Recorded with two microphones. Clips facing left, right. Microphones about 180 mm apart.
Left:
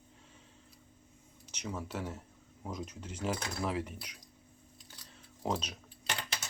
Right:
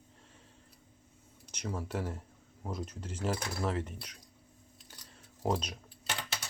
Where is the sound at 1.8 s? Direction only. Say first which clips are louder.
Right 2 dB; centre (ahead or behind).